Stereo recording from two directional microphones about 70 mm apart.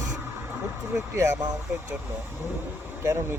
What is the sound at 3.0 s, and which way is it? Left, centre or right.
Speech, right.